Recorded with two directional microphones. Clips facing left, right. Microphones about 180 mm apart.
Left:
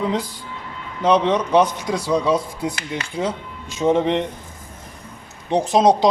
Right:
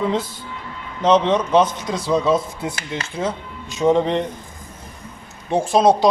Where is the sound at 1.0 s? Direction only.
10° left (ahead or behind).